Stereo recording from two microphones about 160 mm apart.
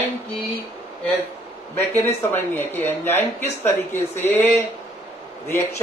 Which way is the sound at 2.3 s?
15° left (ahead or behind).